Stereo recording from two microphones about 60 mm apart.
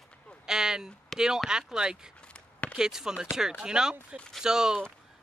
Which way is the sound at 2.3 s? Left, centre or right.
Centre.